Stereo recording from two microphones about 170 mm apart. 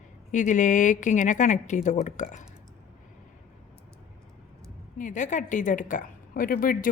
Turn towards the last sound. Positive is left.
turn(degrees=55)  # may be behind; listen again after turning